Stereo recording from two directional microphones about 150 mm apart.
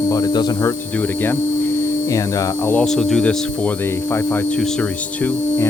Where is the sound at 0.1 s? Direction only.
25° left (ahead or behind).